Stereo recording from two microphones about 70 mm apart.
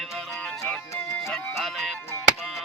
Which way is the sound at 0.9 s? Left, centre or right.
Left.